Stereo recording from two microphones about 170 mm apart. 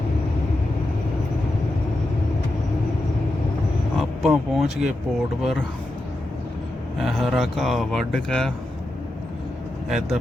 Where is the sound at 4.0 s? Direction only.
Centre (ahead or behind).